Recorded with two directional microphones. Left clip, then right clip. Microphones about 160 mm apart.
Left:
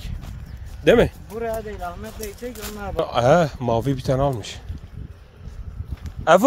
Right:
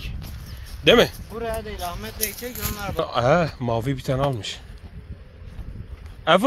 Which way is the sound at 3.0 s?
35° left (ahead or behind).